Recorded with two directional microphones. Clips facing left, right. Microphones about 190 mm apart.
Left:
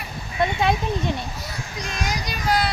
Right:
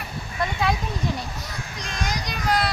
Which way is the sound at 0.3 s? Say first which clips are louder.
Left 4 dB; 25° left (ahead or behind).